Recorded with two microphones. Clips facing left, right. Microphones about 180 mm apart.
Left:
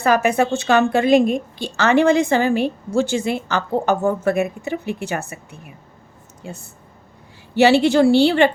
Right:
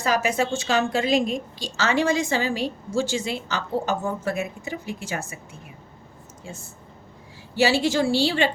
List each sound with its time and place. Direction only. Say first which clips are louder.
0.0 s a woman's voice: left 6 dB; 55° left (ahead or behind)
6.5 s a woman's voice: left 5 dB; 60° left (ahead or behind)